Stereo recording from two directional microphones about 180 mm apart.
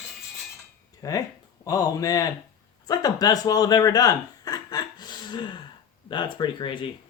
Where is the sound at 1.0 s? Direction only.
20° left (ahead or behind).